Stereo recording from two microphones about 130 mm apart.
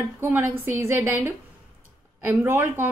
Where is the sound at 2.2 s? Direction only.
15° right (ahead or behind).